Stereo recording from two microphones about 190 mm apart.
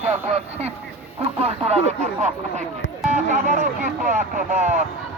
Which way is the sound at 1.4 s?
35° right (ahead or behind).